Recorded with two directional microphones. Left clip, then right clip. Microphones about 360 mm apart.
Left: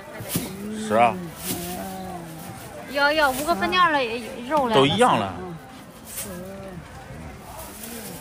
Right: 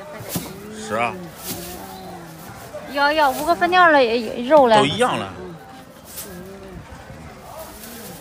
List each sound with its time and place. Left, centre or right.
0.3 s a sound: centre
2.9 s speech: right
4.7 s speech: centre